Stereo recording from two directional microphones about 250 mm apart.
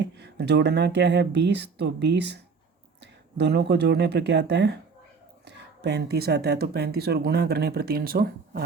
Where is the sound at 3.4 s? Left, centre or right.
Right.